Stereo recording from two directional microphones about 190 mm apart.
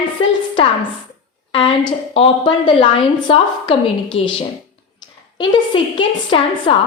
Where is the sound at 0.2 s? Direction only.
30° left (ahead or behind).